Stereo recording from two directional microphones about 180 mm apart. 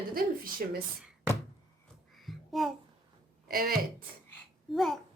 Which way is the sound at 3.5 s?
55° right (ahead or behind).